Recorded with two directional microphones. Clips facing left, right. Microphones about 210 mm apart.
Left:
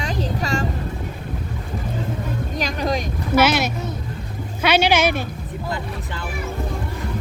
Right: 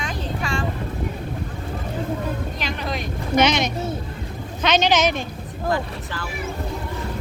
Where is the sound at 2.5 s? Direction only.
40° left (ahead or behind).